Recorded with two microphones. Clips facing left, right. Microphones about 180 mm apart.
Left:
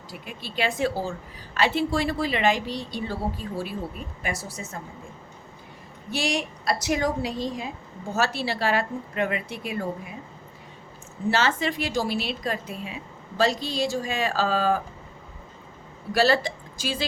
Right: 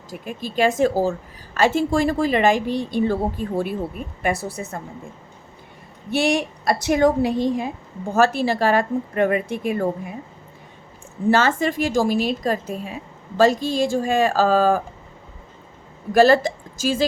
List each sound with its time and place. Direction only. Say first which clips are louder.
0.1 s a woman's voice: right 8 dB; 45° right (ahead or behind)
6.1 s a woman's voice: right 7 dB; 55° right (ahead or behind)
11.3 s a woman's voice: right 6 dB; 45° right (ahead or behind)
16.1 s a woman's voice: right 7 dB; 45° right (ahead or behind)